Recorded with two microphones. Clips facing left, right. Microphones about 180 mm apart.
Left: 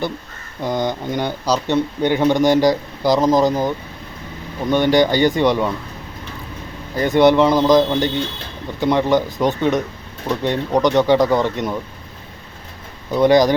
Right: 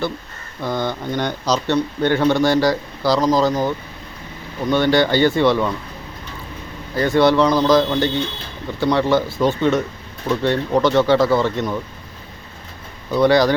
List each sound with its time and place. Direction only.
0.6 s speech: 15° left (ahead or behind)
6.9 s speech: 20° left (ahead or behind)
13.1 s speech: 15° left (ahead or behind)